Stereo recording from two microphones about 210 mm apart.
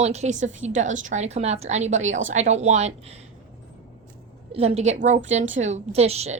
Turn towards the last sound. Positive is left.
turn(degrees=-30)  # may be behind; listen again after turning